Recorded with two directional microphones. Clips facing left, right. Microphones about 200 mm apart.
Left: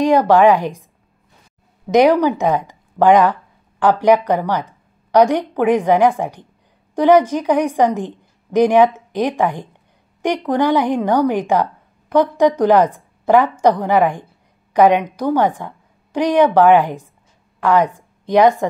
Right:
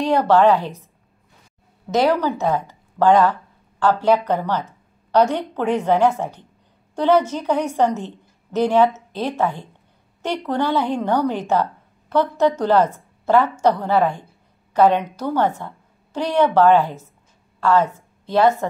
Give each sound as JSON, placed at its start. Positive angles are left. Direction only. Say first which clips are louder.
{"t": 0.0, "sound": "a woman's voice", "louder": "left 4 dB", "side_deg": 10}
{"t": 1.9, "sound": "a woman's voice", "louder": "left 6 dB", "side_deg": 15}